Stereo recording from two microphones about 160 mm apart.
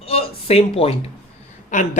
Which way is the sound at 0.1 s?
40° left (ahead or behind).